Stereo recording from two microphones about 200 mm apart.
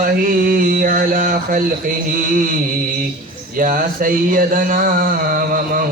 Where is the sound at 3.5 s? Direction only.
45° right (ahead or behind).